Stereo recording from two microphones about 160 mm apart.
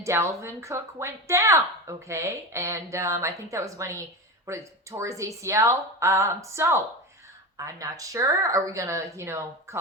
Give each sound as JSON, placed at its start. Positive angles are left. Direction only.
{"t": 0.0, "sound": "speech", "side_deg": -15}